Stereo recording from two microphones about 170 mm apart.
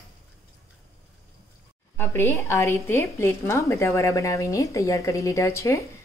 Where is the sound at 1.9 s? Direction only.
10° left (ahead or behind).